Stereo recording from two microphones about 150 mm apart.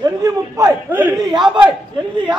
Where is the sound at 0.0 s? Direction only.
25° right (ahead or behind).